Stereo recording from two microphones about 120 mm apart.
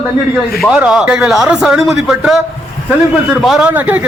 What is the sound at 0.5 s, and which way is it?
A man's voice, 5° right (ahead or behind).